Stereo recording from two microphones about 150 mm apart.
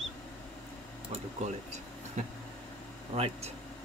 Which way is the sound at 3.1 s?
40° right (ahead or behind).